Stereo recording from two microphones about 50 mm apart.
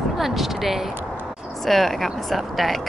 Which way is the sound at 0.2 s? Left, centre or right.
Centre.